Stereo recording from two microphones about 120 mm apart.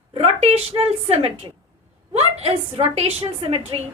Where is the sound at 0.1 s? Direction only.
60° right (ahead or behind).